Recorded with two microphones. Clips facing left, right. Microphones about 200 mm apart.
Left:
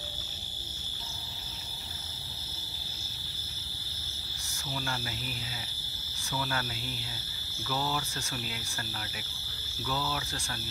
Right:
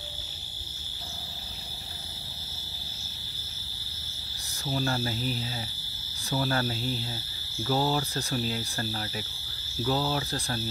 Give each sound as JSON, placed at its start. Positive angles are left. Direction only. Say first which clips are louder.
{"t": 4.6, "sound": "speech", "louder": "right 8 dB", "side_deg": -35}